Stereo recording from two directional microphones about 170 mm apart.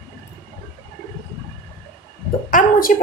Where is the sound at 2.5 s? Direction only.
55° left (ahead or behind).